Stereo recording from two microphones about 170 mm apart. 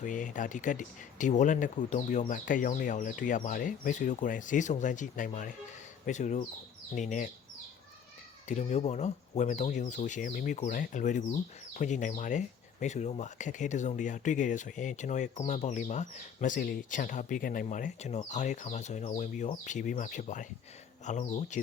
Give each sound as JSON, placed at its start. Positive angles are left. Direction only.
{"t": 0.0, "sound": "speech", "side_deg": 50}
{"t": 8.4, "sound": "speech", "side_deg": 40}